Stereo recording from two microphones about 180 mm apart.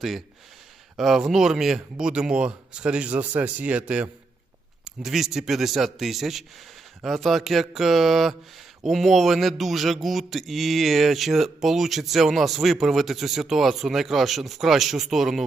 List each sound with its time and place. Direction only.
0.9 s speech: centre (ahead or behind)